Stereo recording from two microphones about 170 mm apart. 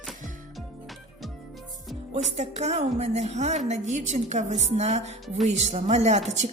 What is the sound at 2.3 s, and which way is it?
A woman's voice, 40° right (ahead or behind).